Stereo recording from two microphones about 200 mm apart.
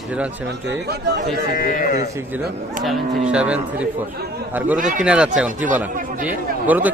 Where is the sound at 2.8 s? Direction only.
5° right (ahead or behind).